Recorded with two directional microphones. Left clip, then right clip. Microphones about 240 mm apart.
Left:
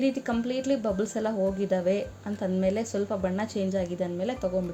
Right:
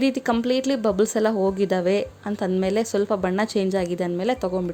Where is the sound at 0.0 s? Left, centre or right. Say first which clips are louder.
Right 6 dB; right.